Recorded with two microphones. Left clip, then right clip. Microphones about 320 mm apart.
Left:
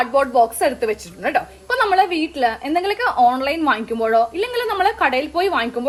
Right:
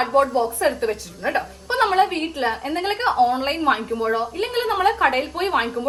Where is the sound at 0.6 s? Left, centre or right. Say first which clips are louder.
Left 2 dB; left.